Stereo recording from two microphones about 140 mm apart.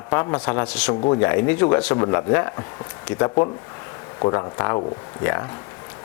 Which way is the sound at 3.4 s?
Centre (ahead or behind).